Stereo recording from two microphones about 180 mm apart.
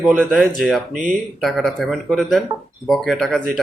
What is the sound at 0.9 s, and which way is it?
Speech, 45° right (ahead or behind).